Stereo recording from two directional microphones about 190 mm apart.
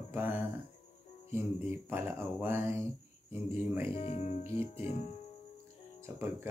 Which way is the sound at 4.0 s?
30° left (ahead or behind).